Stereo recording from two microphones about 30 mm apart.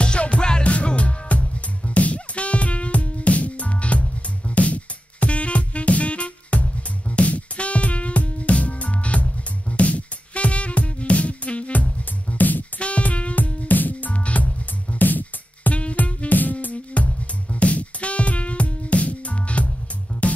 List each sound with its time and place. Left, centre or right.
0.0 s music: left
0.7 s music: left
12.4 s music: left
12.7 s music: left
13.7 s music: left
14.1 s music: left
15.7 s music: left
16.3 s music: left
17.0 s music: left